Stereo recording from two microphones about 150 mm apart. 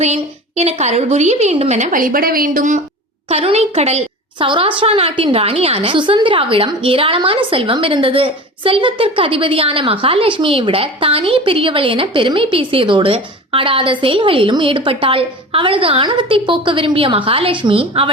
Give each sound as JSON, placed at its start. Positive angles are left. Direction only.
{"t": 0.0, "sound": "a woman's voice", "side_deg": -45}
{"t": 3.2, "sound": "a woman's voice", "side_deg": -45}